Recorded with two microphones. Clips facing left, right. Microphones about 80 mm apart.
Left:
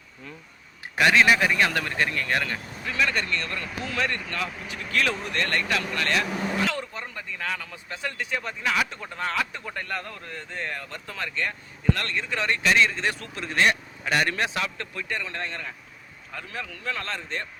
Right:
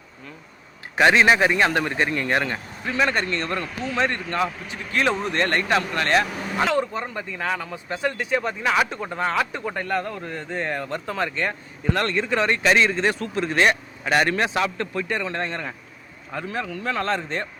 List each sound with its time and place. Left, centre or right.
0.9 s a man's voice: right
4.4 s speech: centre
4.9 s speech: right
6.7 s a man's voice: right